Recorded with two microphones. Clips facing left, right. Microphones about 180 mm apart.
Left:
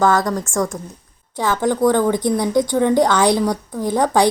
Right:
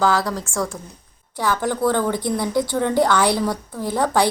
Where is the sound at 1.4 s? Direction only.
20° left (ahead or behind).